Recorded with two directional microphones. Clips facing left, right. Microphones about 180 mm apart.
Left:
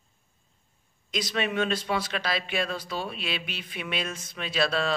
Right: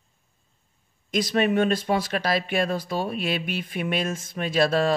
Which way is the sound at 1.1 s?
50° right (ahead or behind).